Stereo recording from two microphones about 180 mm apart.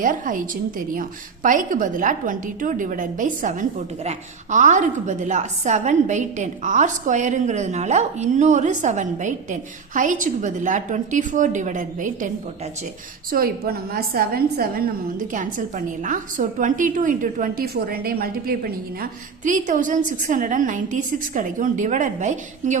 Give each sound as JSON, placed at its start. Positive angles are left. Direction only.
{"t": 0.0, "sound": "a woman's voice", "side_deg": -45}
{"t": 13.3, "sound": "a woman's voice", "side_deg": -55}
{"t": 19.5, "sound": "a woman's voice", "side_deg": -45}